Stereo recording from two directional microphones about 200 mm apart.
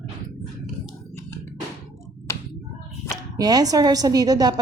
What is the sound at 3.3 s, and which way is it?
A woman's voice, 20° right (ahead or behind).